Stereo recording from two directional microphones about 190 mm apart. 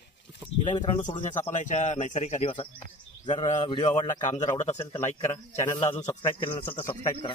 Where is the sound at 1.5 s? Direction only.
40° left (ahead or behind).